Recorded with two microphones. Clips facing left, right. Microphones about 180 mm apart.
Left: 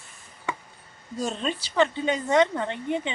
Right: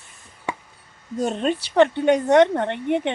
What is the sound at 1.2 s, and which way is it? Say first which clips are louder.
A woman's voice: right 6 dB; 55° right (ahead or behind).